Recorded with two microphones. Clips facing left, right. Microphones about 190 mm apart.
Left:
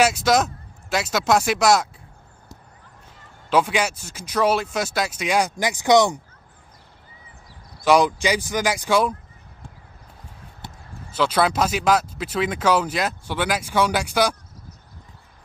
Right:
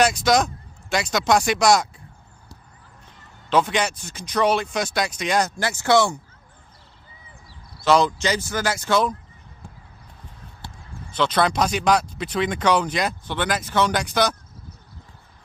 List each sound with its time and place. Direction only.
0.0 s speech: 5° left (ahead or behind)
3.4 s speech: 10° left (ahead or behind)
7.8 s speech: 10° left (ahead or behind)
10.6 s basketball bounce: 20° left (ahead or behind)
11.1 s speech: 5° left (ahead or behind)